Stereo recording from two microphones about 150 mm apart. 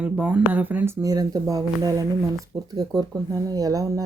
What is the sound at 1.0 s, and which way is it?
A woman's voice, 25° right (ahead or behind).